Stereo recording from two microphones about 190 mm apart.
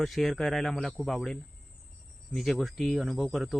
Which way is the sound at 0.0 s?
Centre (ahead or behind).